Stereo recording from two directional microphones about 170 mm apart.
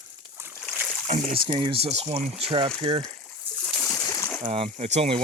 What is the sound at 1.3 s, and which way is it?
Speech, 30° right (ahead or behind).